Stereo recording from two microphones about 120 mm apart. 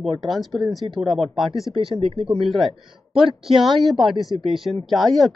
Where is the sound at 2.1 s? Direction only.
50° right (ahead or behind).